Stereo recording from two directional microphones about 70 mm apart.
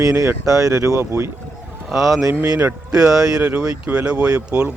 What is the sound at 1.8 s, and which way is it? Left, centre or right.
Speech, centre.